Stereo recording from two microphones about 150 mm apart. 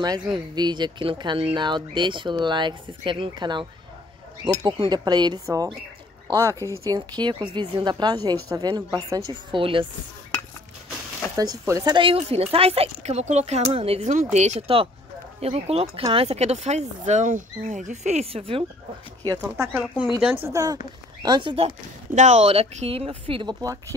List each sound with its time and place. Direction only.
0.3 s speech: 30° right (ahead or behind)
4.6 s a woman's voice: 30° right (ahead or behind)
11.3 s speech: 25° right (ahead or behind)
19.2 s speech: 20° right (ahead or behind)